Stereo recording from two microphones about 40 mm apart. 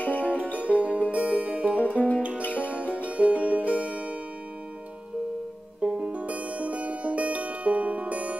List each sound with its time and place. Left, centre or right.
0.0 s music: left
0.6 s music: right
1.8 s music: left
2.4 s music: left
2.7 s music: right
5.8 s music: right